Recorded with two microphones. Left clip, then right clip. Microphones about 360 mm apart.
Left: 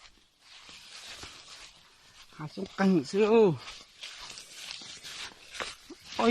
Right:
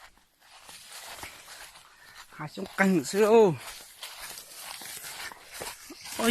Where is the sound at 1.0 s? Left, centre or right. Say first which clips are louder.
Right 2 dB; right.